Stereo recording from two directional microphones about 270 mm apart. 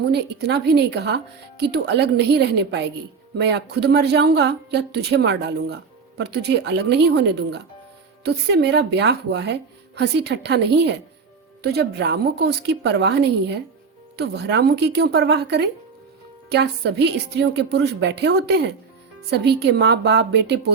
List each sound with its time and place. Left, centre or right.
0.1 s a woman's voice: right